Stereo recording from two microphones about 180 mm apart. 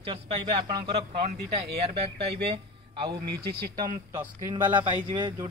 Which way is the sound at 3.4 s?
60° right (ahead or behind).